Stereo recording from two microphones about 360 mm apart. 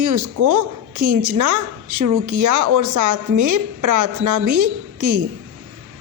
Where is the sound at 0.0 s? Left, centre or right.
Right.